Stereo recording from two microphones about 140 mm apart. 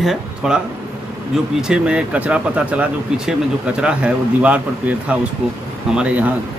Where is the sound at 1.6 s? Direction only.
5° right (ahead or behind).